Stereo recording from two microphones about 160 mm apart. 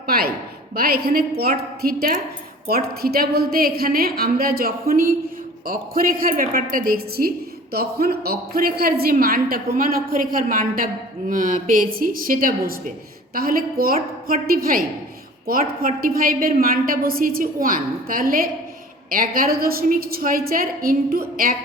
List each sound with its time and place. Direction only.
0.1 s a woman's voice: 70° right (ahead or behind)